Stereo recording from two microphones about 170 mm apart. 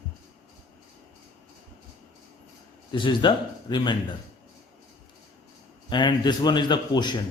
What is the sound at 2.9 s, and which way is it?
A man's voice, 30° left (ahead or behind).